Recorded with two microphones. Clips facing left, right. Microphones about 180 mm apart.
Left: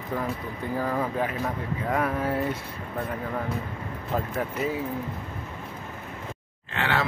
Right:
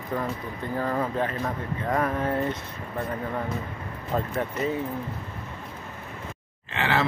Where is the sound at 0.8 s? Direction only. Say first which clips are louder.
Right 1 dB; 5° left (ahead or behind).